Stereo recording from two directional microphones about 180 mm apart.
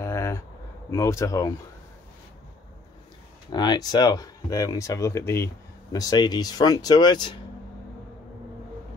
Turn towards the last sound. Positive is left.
turn(degrees=25)  # may be behind; listen again after turning